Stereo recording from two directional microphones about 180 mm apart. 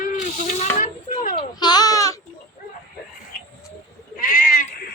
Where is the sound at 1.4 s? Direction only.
25° left (ahead or behind).